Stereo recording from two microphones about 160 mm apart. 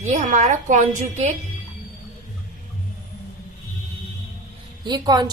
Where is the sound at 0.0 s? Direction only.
50° right (ahead or behind).